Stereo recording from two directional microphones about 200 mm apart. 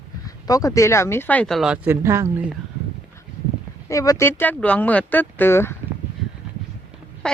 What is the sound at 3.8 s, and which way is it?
Speech, 15° left (ahead or behind).